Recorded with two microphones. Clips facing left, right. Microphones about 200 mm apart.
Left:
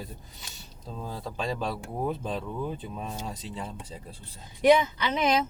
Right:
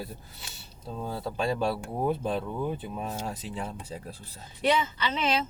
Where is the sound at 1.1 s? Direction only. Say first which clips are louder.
Right 3 dB; 5° right (ahead or behind).